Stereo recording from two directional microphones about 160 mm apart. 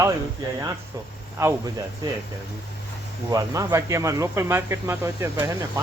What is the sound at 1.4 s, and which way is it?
Speech, 15° right (ahead or behind).